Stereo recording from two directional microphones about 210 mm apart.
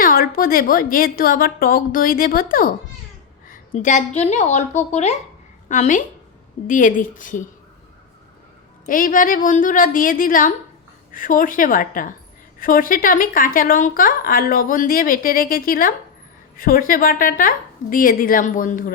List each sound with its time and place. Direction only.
0.0 s a woman's voice: 45° left (ahead or behind)
8.9 s a woman's voice: 40° left (ahead or behind)